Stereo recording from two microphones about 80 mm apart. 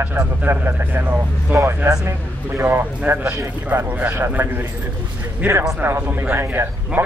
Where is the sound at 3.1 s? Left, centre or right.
Right.